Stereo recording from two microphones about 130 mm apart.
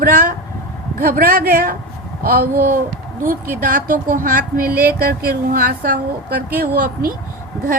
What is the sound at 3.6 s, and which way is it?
A woman's voice, 90° right.